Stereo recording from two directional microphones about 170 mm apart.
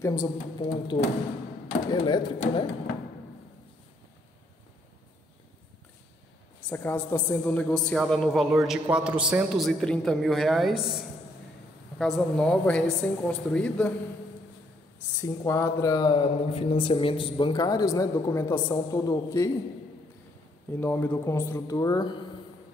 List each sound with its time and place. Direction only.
0.0 s speech: 20° left (ahead or behind)
6.7 s a woman's voice: 10° left (ahead or behind)
15.1 s speech: 15° left (ahead or behind)
20.7 s a woman's voice: 10° left (ahead or behind)